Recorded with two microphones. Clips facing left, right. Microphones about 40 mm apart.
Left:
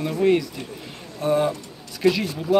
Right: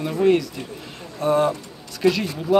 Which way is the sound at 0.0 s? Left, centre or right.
Centre.